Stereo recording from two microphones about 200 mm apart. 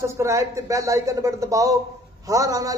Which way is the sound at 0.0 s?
15° right (ahead or behind).